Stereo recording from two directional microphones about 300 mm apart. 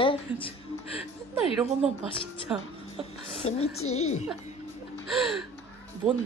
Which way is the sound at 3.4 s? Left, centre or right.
Left.